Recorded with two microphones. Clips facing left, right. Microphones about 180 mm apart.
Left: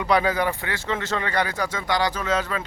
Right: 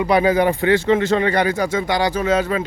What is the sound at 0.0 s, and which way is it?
Speech, 15° right (ahead or behind).